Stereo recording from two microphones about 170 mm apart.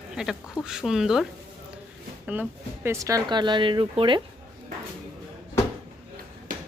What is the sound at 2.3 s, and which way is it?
Speech, 10° right (ahead or behind).